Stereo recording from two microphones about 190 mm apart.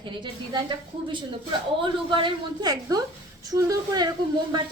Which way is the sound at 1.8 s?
25° right (ahead or behind).